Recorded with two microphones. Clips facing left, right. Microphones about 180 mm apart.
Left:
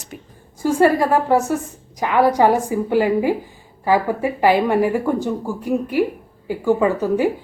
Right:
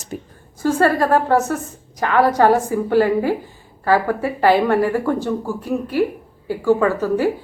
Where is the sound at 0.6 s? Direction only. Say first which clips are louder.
Left 1 dB; 15° left (ahead or behind).